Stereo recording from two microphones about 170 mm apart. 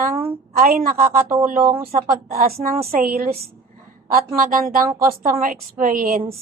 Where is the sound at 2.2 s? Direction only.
60° right (ahead or behind).